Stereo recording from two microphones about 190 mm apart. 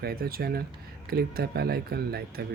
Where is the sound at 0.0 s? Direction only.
55° right (ahead or behind).